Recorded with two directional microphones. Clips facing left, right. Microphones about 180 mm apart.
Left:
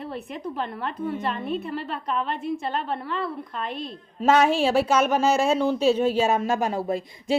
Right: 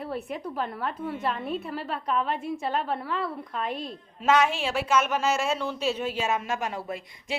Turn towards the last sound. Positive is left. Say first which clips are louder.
# left 9 dB
turn(degrees=35)  # may be behind; listen again after turning